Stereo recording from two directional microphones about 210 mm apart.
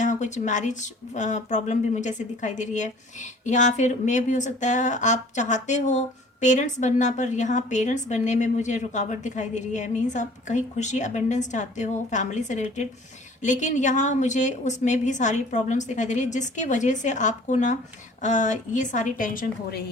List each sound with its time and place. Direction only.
0.0 s speech: 35° left (ahead or behind)